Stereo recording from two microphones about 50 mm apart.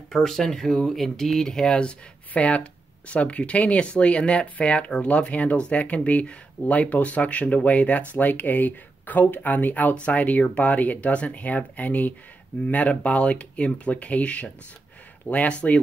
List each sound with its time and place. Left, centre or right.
0.1 s speech: centre; by 15.8 s left